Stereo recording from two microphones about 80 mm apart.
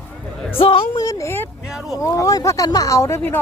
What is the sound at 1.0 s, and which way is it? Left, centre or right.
Speech, left.